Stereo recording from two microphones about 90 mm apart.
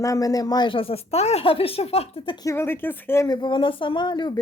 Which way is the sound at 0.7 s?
90° left.